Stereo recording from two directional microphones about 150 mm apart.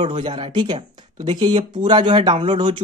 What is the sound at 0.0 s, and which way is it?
Speech, 35° right (ahead or behind).